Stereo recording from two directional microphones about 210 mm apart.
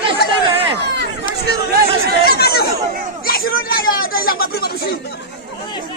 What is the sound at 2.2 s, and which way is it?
Speech, 50° left (ahead or behind).